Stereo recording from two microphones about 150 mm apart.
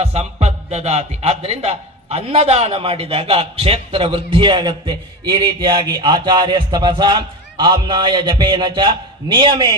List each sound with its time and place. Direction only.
0.0 s a man's voice: 45° right (ahead or behind)